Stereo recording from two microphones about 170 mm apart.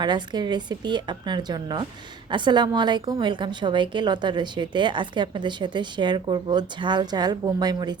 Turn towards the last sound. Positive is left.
turn(degrees=-25)  # may be behind; listen again after turning